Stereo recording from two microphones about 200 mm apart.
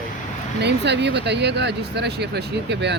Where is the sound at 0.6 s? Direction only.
60° right (ahead or behind).